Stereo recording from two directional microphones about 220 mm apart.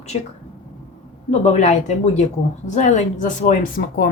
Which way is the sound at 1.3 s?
30° left (ahead or behind).